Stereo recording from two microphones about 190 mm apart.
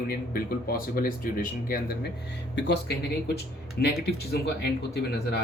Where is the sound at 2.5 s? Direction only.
65° left (ahead or behind).